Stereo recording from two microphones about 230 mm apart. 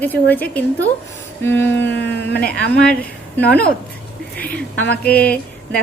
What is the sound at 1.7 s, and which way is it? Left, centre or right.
Speech, left.